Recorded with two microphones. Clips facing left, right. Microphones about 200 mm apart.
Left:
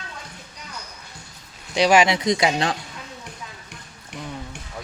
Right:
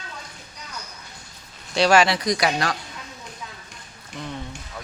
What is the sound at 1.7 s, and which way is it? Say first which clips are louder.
Speech: left 1 dB; 15° left (ahead or behind).